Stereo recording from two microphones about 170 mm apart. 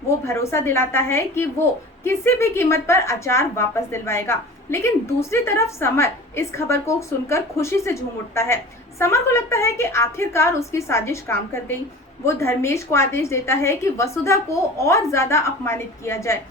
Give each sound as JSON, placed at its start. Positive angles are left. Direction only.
{"t": 0.3, "sound": "a woman's voice", "side_deg": 15}